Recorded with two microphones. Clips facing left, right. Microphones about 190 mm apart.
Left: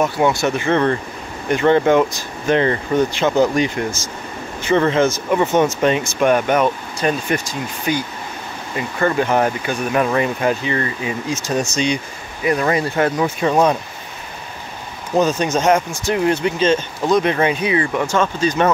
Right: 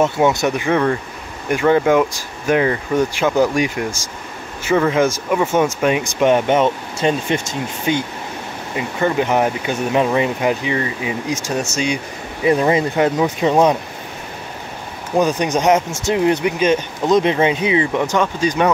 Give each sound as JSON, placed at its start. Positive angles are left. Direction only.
{"t": 0.0, "sound": "speech", "side_deg": -20}
{"t": 12.4, "sound": "speech", "side_deg": -25}
{"t": 15.1, "sound": "speech", "side_deg": -15}